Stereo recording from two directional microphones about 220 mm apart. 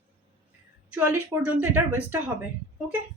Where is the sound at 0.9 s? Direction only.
5° right (ahead or behind).